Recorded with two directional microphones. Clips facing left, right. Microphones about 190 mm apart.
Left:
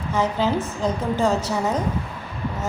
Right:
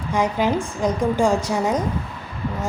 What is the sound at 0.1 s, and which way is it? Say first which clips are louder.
A woman's voice: right 1 dB; 15° right (ahead or behind).